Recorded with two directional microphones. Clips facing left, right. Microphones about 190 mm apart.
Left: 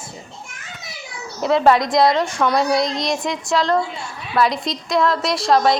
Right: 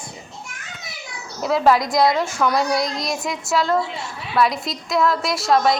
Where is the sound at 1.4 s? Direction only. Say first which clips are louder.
Left 2 dB; centre (ahead or behind).